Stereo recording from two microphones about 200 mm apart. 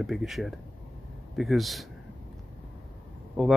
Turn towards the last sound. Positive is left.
turn(degrees=0)  # may be behind; listen again after turning